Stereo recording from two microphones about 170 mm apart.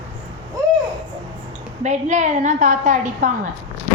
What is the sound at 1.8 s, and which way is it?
A woman's voice, 45° right (ahead or behind).